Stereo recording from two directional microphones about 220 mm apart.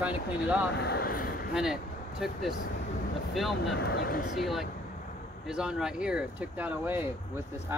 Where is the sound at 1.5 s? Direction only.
5° right (ahead or behind).